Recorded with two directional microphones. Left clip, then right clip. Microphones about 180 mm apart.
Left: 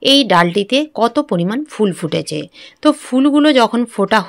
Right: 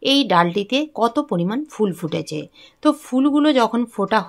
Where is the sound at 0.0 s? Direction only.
20° left (ahead or behind).